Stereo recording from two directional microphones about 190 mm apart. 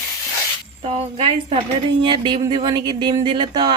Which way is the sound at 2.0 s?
25° right (ahead or behind).